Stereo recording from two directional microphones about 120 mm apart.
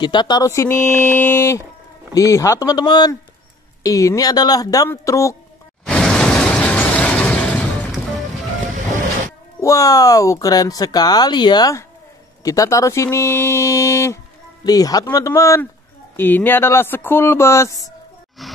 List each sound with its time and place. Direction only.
0.0 s speech: 40° left (ahead or behind)
0.5 s speech: 20° left (ahead or behind); by 3.2 s 40° left (ahead or behind)
3.8 s speech: 25° left (ahead or behind)
5.9 s vehicle: 5° left (ahead or behind)
8.7 s vehicle: 90° right
9.6 s speech: 30° left (ahead or behind)
18.4 s grunt: centre (ahead or behind)